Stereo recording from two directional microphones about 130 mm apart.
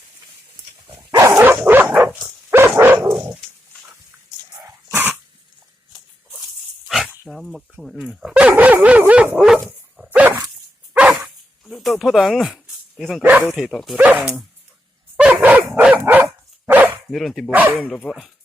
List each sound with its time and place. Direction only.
1.4 s dog: 15° right (ahead or behind)
4.9 s dog: 15° right (ahead or behind)
6.8 s speech: centre (ahead or behind)
10.1 s dog: 15° right (ahead or behind)
10.9 s bow-wow: 5° right (ahead or behind)
13.0 s speech: centre (ahead or behind)
13.2 s speech: 15° right (ahead or behind)
13.5 s speech: centre (ahead or behind)
13.9 s speech: 10° right (ahead or behind)
15.1 s dog: 15° right (ahead or behind)
17.1 s speech: centre (ahead or behind)
17.5 s speech: 15° right (ahead or behind)
17.8 s speech: 5° left (ahead or behind)